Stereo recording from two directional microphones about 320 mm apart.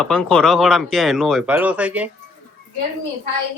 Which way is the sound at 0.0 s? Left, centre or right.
Centre.